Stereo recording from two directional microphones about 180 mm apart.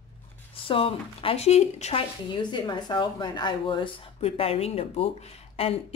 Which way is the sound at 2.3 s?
25° left (ahead or behind).